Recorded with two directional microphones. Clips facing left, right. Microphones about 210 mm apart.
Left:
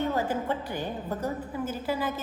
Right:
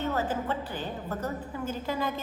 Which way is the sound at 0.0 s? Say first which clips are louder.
Left 2 dB; 10° left (ahead or behind).